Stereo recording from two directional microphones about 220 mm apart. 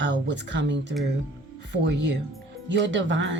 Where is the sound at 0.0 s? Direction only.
55° right (ahead or behind).